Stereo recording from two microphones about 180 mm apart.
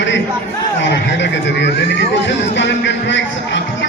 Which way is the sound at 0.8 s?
80° left.